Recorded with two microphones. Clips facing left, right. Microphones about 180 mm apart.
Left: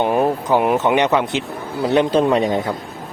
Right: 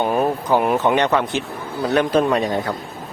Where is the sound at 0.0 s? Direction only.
15° left (ahead or behind).